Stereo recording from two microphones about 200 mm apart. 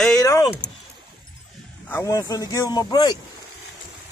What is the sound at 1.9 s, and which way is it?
Speech, 15° left (ahead or behind).